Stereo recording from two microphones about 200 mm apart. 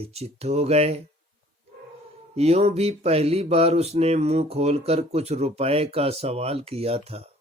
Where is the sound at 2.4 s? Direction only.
30° right (ahead or behind).